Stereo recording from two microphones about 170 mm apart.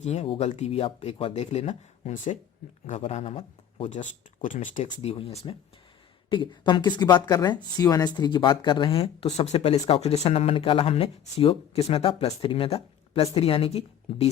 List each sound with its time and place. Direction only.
0.0 s speech: 40° left (ahead or behind)
4.4 s speech: 50° left (ahead or behind)